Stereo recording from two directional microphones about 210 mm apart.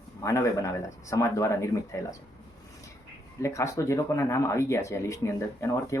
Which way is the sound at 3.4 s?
15° left (ahead or behind).